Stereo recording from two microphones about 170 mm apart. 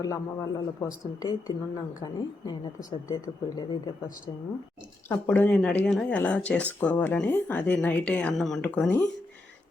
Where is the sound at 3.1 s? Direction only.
20° left (ahead or behind).